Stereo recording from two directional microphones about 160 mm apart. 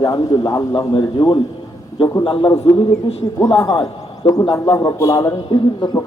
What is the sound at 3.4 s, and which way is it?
A man's voice, 20° left (ahead or behind).